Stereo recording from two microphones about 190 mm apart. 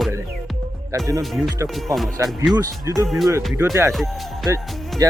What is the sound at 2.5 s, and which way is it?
Speech, 20° right (ahead or behind).